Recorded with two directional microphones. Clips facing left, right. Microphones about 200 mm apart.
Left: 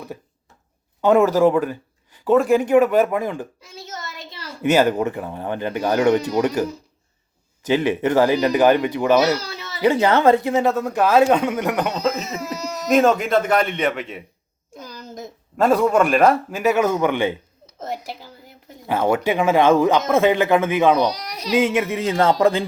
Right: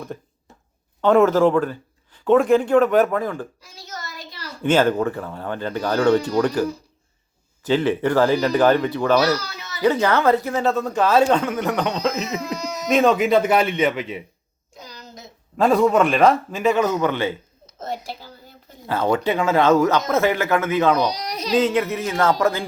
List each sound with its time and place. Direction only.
1.0 s a child's voice: 10° left (ahead or behind)
4.7 s speech: 15° left (ahead or behind)
14.9 s a sound: 50° left (ahead or behind)
15.5 s speech: centre (ahead or behind)
21.1 s a child's voice: 20° right (ahead or behind)
21.5 s speech: 15° left (ahead or behind)
22.1 s speech: 25° left (ahead or behind)